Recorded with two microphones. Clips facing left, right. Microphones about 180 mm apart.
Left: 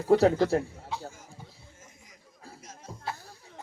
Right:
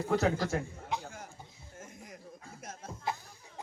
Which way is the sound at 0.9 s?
15° right (ahead or behind).